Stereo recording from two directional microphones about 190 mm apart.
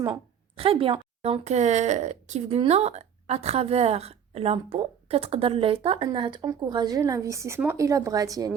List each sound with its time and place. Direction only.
0.0 s a woman's voice: 25° right (ahead or behind)